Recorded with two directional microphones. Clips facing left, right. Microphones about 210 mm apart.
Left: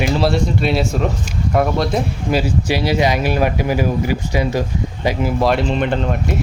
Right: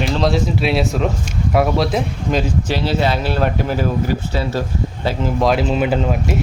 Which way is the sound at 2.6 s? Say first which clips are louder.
Left 2 dB; 10° left (ahead or behind).